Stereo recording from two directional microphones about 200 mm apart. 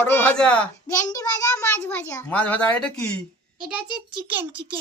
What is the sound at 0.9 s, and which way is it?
A child's voice, 20° left (ahead or behind).